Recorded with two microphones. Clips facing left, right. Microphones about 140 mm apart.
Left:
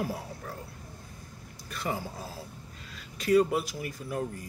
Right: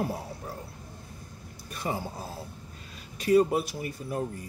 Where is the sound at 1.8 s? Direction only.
25° right (ahead or behind).